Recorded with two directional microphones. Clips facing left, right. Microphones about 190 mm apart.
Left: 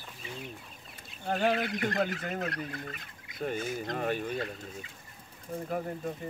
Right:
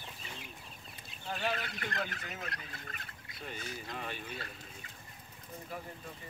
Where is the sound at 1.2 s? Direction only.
50° left (ahead or behind).